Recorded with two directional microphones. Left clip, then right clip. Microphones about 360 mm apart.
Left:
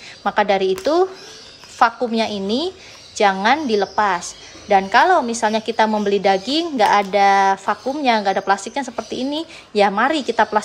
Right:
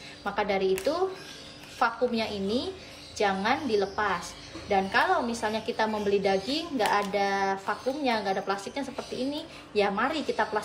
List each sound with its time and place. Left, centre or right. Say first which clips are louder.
0.2 s a woman's voice: left 11 dB; centre